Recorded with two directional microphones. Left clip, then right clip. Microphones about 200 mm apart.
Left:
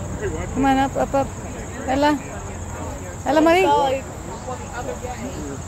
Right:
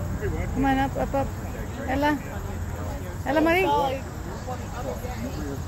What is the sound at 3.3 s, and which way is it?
Speech, 30° left (ahead or behind).